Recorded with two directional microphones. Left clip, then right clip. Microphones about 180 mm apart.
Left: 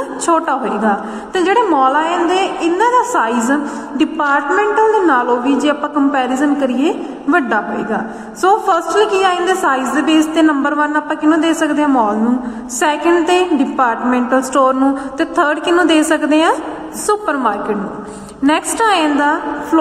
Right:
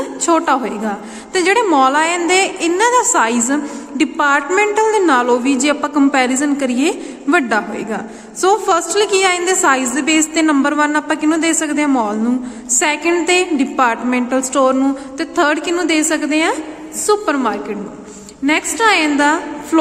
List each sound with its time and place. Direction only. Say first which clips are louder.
0.3 s a woman's voice: left 1 dB; 20° right (ahead or behind)
0.8 s a woman's voice: left 7 dB; 35° right (ahead or behind)
1.7 s a woman's voice: even; 50° right (ahead or behind)
3.0 s a woman's voice: even; 35° right (ahead or behind)